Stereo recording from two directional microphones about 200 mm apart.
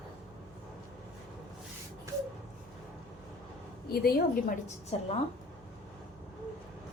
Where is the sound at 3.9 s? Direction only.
50° left (ahead or behind).